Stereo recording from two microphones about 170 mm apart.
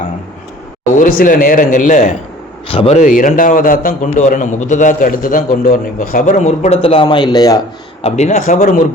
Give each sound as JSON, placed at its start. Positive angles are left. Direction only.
{"t": 0.9, "sound": "a man's voice", "side_deg": 55}
{"t": 2.6, "sound": "a man's voice", "side_deg": 35}
{"t": 8.0, "sound": "a man's voice", "side_deg": 40}